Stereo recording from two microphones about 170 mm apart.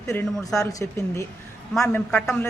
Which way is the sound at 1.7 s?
5° left (ahead or behind).